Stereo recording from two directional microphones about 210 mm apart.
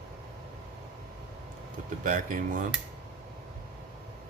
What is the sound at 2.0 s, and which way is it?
Speech, 40° right (ahead or behind).